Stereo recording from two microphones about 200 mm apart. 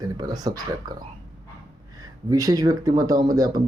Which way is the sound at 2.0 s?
15° right (ahead or behind).